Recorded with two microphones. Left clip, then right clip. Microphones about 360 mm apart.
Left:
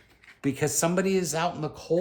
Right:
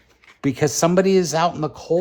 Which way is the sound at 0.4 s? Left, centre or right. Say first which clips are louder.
Right 7 dB; right.